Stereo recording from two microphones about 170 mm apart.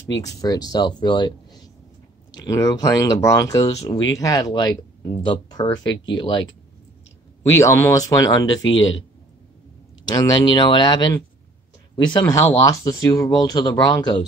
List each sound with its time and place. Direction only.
0.4 s speech: 20° left (ahead or behind)
7.5 s speech: 15° left (ahead or behind)
10.0 s speech: 25° left (ahead or behind)